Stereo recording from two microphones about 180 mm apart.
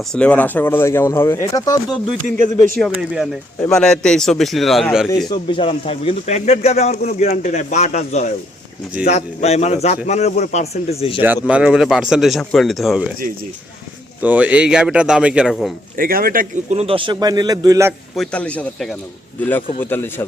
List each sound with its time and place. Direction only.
0.1 s speech: 5° left (ahead or behind)
2.7 s speech: centre (ahead or behind)
5.3 s a man's voice: 25° left (ahead or behind)
11.4 s speech: 5° right (ahead or behind)
14.2 s speech: 10° right (ahead or behind)
16.0 s speech: 55° right (ahead or behind)
16.7 s a man's voice: 30° right (ahead or behind)
18.2 s speech: 5° left (ahead or behind)